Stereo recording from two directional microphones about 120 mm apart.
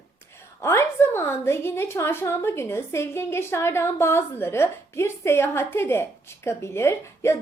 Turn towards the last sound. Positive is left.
turn(degrees=20)  # may be behind; listen again after turning